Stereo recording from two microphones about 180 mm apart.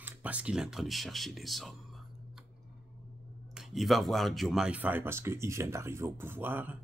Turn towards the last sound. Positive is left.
turn(degrees=-10)  # may be behind; listen again after turning